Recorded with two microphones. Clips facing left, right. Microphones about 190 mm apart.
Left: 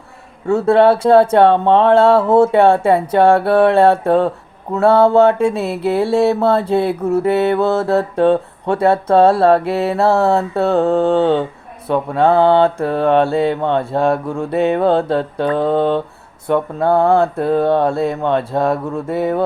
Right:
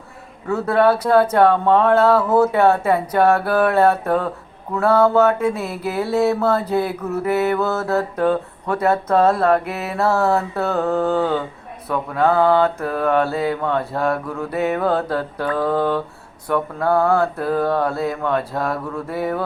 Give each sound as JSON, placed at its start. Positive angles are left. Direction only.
{"t": 0.4, "sound": "mantra", "side_deg": 25}